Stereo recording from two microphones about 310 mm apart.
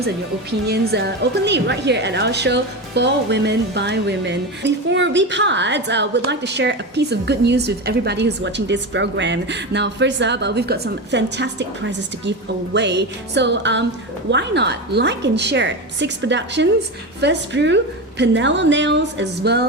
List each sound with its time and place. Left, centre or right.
0.7 s a woman's voice: right